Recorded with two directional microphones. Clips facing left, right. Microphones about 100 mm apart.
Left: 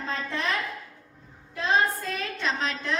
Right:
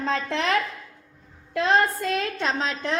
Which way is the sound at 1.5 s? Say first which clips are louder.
Right 4 dB; 85° right.